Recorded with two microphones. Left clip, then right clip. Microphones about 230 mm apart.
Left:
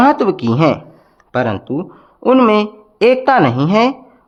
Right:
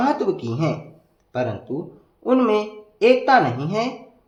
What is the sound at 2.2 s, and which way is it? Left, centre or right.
Speech, left.